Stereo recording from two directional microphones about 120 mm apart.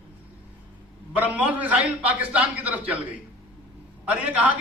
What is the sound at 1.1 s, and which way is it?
A man's voice, 15° right (ahead or behind).